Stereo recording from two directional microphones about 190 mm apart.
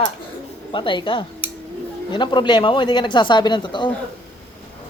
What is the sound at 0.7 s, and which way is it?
Speech, 25° left (ahead or behind).